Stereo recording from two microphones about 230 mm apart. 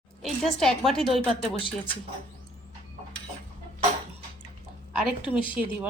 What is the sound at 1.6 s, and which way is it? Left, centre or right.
Speech, left.